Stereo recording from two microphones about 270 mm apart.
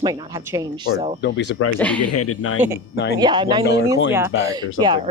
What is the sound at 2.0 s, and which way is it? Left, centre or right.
Speech, left.